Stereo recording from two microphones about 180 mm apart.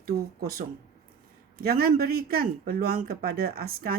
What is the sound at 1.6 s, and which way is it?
Speech, 60° right (ahead or behind).